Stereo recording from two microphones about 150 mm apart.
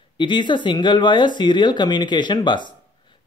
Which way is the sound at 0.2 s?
30° left (ahead or behind).